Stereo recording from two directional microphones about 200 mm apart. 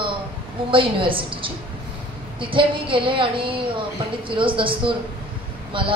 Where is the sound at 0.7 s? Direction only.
25° right (ahead or behind).